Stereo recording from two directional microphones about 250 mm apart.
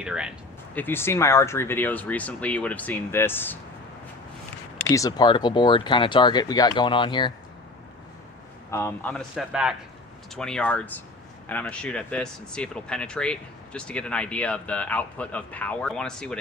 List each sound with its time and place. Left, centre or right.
0.0 s speech: centre
0.7 s speech: centre
4.9 s speech: centre
8.6 s speech: centre